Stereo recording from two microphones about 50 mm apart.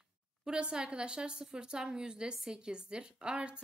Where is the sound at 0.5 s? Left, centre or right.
Centre.